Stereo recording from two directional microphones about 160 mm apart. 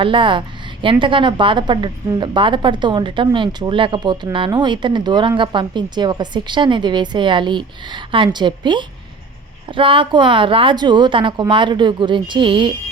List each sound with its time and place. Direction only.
0.0 s a woman's voice: 30° right (ahead or behind)